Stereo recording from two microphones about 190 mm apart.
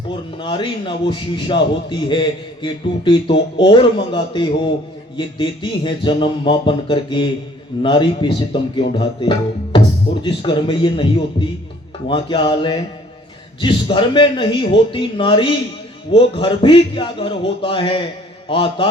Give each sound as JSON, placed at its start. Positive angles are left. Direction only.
{"t": 0.3, "sound": "a man's voice", "side_deg": 25}